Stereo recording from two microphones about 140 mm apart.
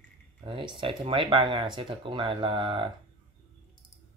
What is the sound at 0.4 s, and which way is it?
Speech, 40° right (ahead or behind).